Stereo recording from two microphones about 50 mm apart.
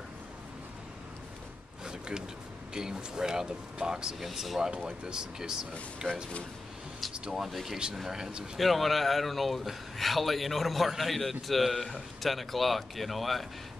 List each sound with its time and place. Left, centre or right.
1.9 s a sound: centre
2.7 s speech: centre
4.6 s speech: centre
7.2 s speech: centre
8.5 s speech: centre